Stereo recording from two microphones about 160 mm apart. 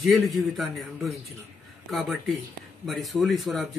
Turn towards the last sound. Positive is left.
turn(degrees=0)  # may be behind; listen again after turning